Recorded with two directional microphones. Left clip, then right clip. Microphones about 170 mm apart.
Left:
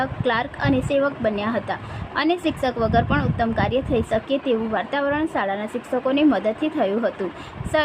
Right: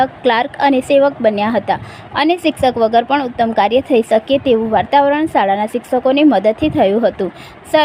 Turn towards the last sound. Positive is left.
turn(degrees=-30)  # may be behind; listen again after turning